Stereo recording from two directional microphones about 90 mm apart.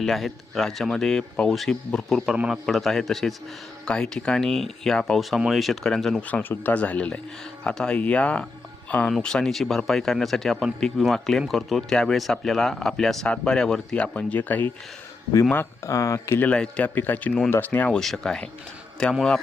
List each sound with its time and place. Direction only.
0.0 s speech: centre (ahead or behind)
6.2 s speech: 20° left (ahead or behind)
15.5 s speech: 35° left (ahead or behind)
16.4 s speech: 10° left (ahead or behind)